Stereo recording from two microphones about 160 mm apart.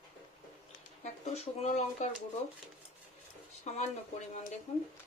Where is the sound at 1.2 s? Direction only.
45° left (ahead or behind).